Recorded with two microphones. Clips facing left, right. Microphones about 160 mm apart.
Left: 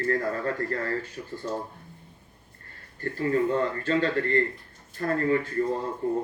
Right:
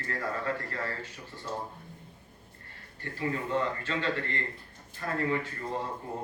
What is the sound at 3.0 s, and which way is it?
A man's voice, 45° left (ahead or behind).